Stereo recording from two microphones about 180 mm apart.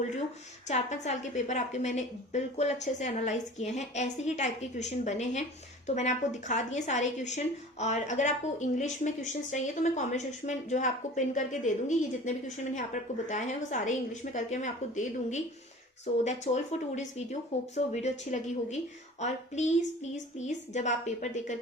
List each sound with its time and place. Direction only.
0.7 s a woman's voice: 40° left (ahead or behind)